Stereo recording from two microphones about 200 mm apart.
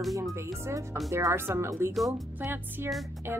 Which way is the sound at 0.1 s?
15° right (ahead or behind).